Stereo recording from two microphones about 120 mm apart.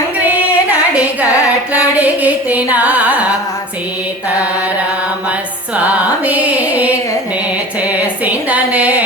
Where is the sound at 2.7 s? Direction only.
15° right (ahead or behind).